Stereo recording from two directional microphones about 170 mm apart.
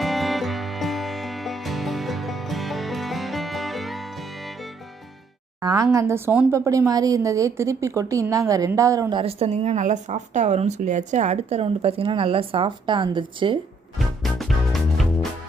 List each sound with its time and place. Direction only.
0.0 s music: centre (ahead or behind)
5.6 s a woman's voice: 20° right (ahead or behind)
14.2 s music: centre (ahead or behind)